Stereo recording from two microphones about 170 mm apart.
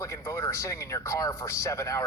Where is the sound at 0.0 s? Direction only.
15° left (ahead or behind).